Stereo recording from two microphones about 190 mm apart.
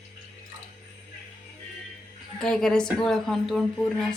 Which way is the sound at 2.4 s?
5° left (ahead or behind).